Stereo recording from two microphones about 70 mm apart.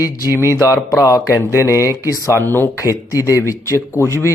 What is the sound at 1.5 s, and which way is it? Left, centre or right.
Mantra, right.